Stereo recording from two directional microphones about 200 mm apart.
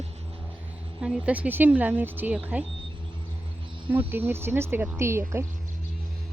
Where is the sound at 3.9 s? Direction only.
10° right (ahead or behind).